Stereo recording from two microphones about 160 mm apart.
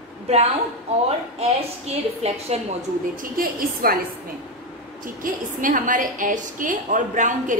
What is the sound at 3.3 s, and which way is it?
Speech, 65° right (ahead or behind).